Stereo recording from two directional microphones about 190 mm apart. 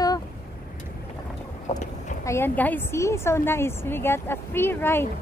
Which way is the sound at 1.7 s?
35° left (ahead or behind).